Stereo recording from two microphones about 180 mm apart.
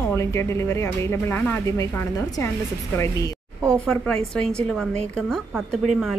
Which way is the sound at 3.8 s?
5° left (ahead or behind).